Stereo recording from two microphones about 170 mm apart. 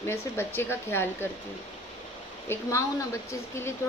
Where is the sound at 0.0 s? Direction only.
15° left (ahead or behind).